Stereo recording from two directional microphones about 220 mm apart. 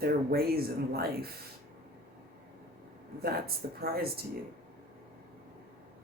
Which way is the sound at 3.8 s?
45° right (ahead or behind).